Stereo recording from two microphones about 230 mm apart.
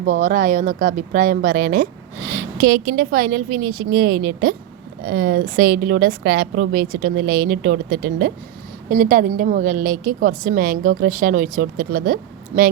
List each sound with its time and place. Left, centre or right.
0.1 s speech: right